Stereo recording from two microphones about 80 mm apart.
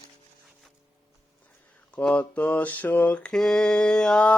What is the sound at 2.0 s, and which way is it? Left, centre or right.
Mantra, centre.